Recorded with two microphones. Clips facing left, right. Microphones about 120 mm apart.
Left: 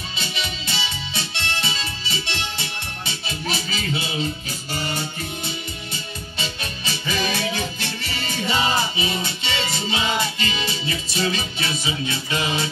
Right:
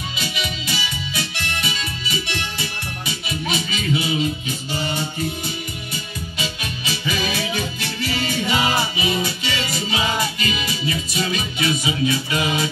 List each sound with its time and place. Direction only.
0.2 s music: 30° left (ahead or behind)
6.3 s music: 30° left (ahead or behind)